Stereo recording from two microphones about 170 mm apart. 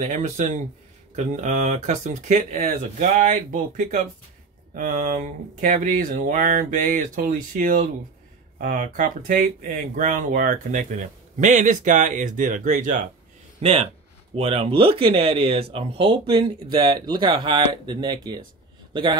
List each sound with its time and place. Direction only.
0.0 s speech: 45° right (ahead or behind)
13.6 s speech: 40° right (ahead or behind)